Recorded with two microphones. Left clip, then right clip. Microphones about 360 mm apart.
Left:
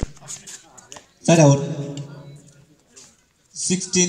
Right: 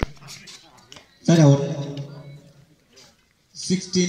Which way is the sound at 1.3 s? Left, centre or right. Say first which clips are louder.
Left 3 dB; left.